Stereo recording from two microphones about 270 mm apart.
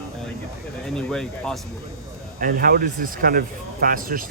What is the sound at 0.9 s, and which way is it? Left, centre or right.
Speech, centre.